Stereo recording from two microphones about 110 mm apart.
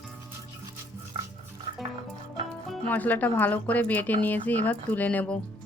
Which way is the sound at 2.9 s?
15° left (ahead or behind).